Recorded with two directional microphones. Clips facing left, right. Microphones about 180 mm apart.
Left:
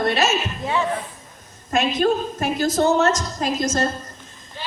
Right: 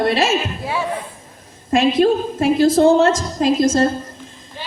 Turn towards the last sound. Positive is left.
turn(degrees=-30)  # may be behind; listen again after turning